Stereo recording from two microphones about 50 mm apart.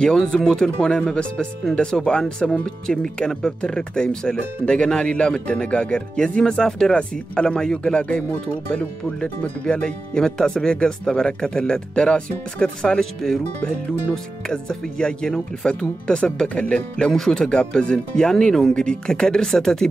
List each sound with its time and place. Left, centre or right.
0.0 s speech: centre
13.0 s speech: centre
13.4 s speech: left
14.1 s speech: centre